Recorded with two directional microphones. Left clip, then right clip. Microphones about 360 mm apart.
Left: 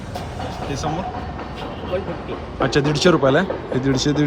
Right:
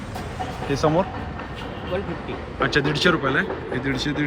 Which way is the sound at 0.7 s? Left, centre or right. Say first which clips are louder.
Right 7 dB; centre.